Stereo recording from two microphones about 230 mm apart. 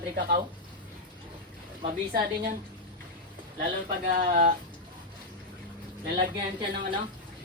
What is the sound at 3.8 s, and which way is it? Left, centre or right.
Speech, right.